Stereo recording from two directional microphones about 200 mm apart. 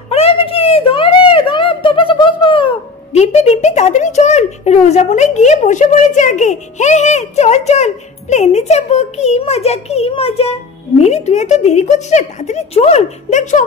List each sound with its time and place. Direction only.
0.1 s speech: 30° left (ahead or behind)